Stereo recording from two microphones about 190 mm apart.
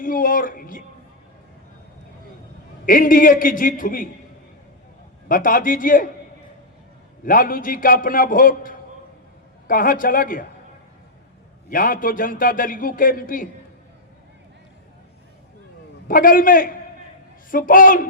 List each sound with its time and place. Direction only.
0.0 s music: 45° left (ahead or behind)
2.8 s a man's voice: 45° left (ahead or behind)
5.3 s a man's voice: 45° left (ahead or behind)
7.3 s a man's voice: 45° left (ahead or behind)
11.7 s a man's voice: 45° left (ahead or behind)
16.0 s a man's voice: 45° left (ahead or behind)